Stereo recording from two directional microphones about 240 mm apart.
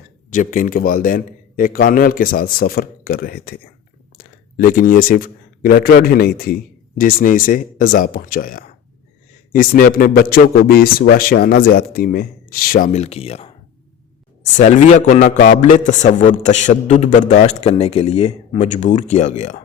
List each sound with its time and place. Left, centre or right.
0.3 s a man's voice: left
14.5 s a man's voice: left